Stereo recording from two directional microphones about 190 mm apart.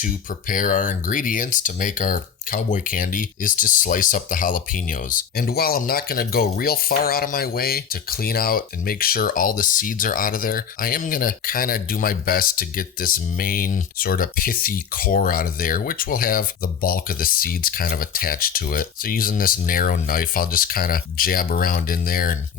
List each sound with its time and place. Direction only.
0.0 s speech: 45° left (ahead or behind)